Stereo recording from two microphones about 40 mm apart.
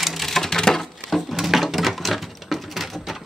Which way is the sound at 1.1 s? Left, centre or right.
Centre.